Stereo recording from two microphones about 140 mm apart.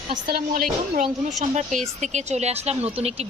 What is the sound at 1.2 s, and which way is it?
A woman's voice, 60° right (ahead or behind).